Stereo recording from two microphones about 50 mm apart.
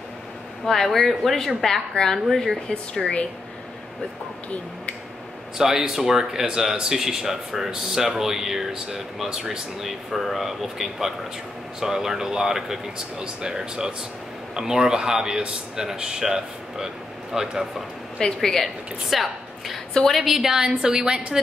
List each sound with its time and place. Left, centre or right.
0.7 s a woman's voice: centre
3.0 s speech: left
5.6 s speech: centre
18.2 s a woman's voice: centre